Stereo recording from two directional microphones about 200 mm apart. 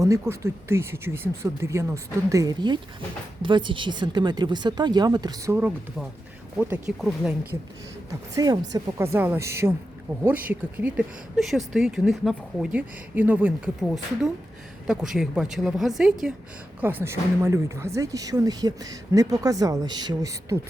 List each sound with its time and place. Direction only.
0.0 s speech: 15° right (ahead or behind)
5.5 s speech: 10° right (ahead or behind)
8.4 s speech: 20° right (ahead or behind)